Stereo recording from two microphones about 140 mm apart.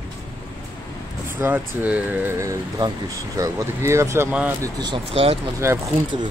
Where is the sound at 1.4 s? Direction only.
15° right (ahead or behind).